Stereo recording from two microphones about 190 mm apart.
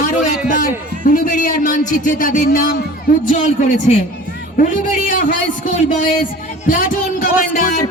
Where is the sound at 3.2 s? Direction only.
40° left (ahead or behind).